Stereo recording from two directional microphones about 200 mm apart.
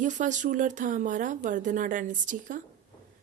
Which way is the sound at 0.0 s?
40° right (ahead or behind).